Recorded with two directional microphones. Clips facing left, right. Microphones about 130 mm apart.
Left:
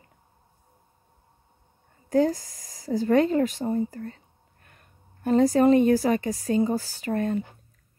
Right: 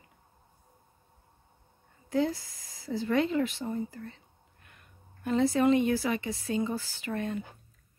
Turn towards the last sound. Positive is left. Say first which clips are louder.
# left 7 dB
turn(degrees=40)  # may be behind; listen again after turning